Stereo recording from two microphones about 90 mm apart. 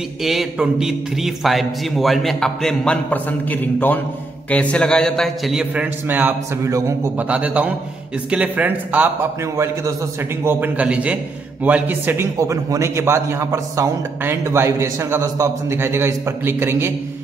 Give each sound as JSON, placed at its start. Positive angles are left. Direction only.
{"t": 0.2, "sound": "a man's voice", "side_deg": -5}
{"t": 6.0, "sound": "a man's voice", "side_deg": -20}
{"t": 6.6, "sound": "a man's voice", "side_deg": -35}
{"t": 7.2, "sound": "speech", "side_deg": -15}
{"t": 9.4, "sound": "a man's voice", "side_deg": -35}
{"t": 10.4, "sound": "a man's voice", "side_deg": -20}
{"t": 12.4, "sound": "a man's voice", "side_deg": -40}